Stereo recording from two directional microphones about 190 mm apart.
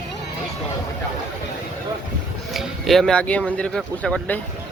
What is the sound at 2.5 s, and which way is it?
Speech, centre (ahead or behind).